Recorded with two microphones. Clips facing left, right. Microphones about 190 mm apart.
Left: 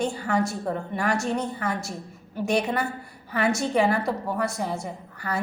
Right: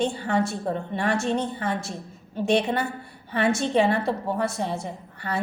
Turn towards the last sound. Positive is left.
turn(degrees=-25)  # may be behind; listen again after turning